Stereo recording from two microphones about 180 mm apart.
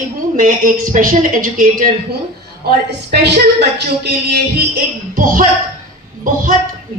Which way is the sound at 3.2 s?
70° right (ahead or behind).